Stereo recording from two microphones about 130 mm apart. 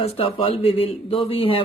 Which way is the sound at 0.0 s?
45° left (ahead or behind).